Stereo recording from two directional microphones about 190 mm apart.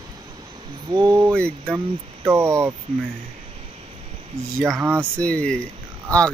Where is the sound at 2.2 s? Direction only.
15° right (ahead or behind).